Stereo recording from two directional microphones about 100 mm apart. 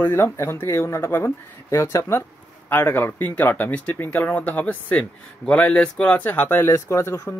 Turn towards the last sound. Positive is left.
turn(degrees=25)  # may be behind; listen again after turning